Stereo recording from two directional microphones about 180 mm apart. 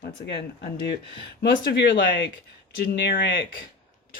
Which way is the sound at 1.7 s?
65° left (ahead or behind).